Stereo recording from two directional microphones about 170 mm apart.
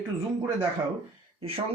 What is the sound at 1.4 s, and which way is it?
Speech, 35° right (ahead or behind).